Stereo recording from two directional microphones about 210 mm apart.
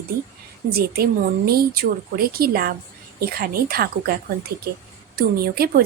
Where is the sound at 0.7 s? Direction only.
45° right (ahead or behind).